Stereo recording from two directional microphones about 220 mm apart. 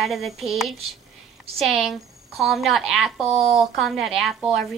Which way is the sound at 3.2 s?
30° right (ahead or behind).